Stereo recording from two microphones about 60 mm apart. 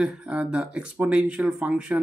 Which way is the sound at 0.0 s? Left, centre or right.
Right.